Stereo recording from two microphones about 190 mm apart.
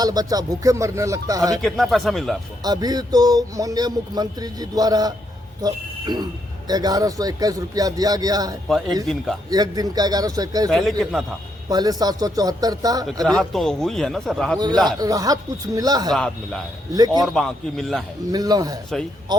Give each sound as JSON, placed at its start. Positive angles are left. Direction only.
{"t": 0.0, "sound": "speech", "side_deg": -20}
{"t": 1.6, "sound": "a man's voice", "side_deg": 0}
{"t": 2.6, "sound": "speech", "side_deg": -20}
{"t": 10.7, "sound": "a man's voice", "side_deg": 0}
{"t": 11.7, "sound": "speech", "side_deg": -20}
{"t": 13.2, "sound": "a man's voice", "side_deg": 5}
{"t": 14.8, "sound": "speech", "side_deg": -20}
{"t": 16.1, "sound": "a man's voice", "side_deg": 0}
{"t": 16.9, "sound": "speech", "side_deg": -20}
{"t": 17.2, "sound": "a man's voice", "side_deg": 0}
{"t": 18.3, "sound": "speech", "side_deg": -20}